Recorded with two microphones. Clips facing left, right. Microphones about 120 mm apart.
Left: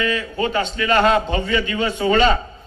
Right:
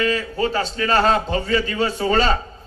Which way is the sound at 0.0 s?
35° right (ahead or behind).